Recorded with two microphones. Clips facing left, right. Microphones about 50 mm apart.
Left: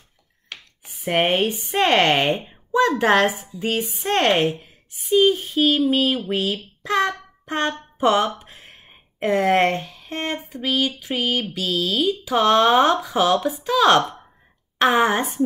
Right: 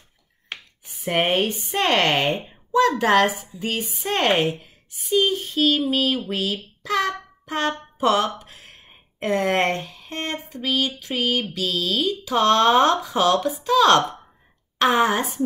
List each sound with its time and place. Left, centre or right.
0.5 s a sound: right
0.8 s speech: centre
1.9 s a woman's voice: left
3.8 s speech: centre
8.4 s a sound: centre
9.4 s speech: centre